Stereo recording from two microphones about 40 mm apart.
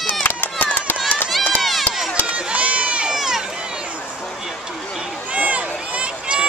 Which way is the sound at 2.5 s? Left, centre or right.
Right.